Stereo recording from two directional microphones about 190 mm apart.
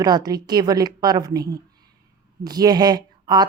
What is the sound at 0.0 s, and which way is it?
Speech, 20° right (ahead or behind).